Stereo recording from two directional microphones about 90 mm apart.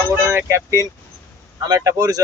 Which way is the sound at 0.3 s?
30° right (ahead or behind).